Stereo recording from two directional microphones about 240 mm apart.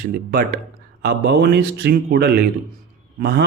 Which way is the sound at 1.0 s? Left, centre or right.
Right.